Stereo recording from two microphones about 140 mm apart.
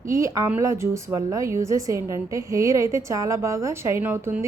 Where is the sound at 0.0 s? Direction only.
20° right (ahead or behind).